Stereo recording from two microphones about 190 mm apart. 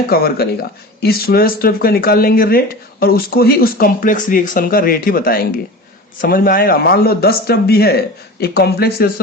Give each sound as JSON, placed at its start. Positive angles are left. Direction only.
{"t": 0.1, "sound": "speech", "side_deg": 55}